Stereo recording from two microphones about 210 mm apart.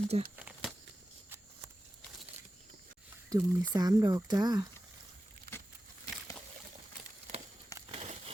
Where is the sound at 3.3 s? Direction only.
15° right (ahead or behind).